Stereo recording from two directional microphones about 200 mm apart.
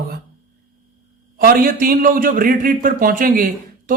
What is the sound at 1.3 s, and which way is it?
A man's voice, 45° right (ahead or behind).